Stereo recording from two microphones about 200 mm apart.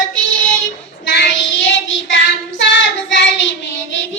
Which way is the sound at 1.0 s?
65° left (ahead or behind).